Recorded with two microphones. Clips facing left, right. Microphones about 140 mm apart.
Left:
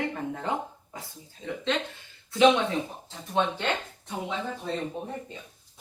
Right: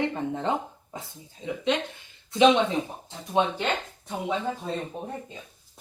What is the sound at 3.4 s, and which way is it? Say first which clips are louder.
Speech: right 2 dB; 15° right (ahead or behind).